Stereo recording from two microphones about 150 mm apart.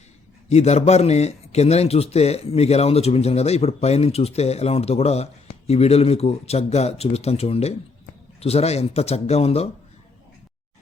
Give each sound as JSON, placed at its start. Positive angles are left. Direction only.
{"t": 0.4, "sound": "a man's voice", "side_deg": 45}